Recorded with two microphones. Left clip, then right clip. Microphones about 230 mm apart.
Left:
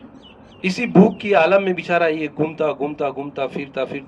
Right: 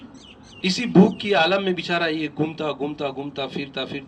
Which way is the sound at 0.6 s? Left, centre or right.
Right.